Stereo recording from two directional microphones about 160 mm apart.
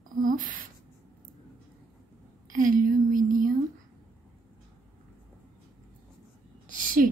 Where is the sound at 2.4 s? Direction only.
55° right (ahead or behind).